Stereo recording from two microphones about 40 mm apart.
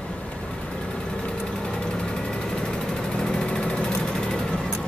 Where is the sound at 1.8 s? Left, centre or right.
Left.